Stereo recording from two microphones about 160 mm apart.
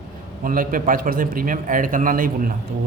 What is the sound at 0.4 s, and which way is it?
A man's voice, 60° right (ahead or behind).